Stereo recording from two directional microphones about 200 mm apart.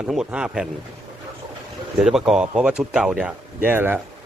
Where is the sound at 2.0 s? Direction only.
5° right (ahead or behind).